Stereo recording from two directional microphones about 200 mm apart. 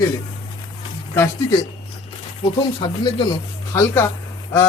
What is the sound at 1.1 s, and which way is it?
Speech, 15° left (ahead or behind).